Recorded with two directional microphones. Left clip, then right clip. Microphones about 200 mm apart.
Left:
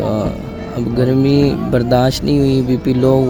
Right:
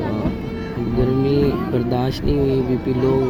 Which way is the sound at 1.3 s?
55° left (ahead or behind).